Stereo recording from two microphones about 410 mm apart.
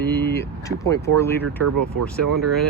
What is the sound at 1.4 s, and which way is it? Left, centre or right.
Speech, right.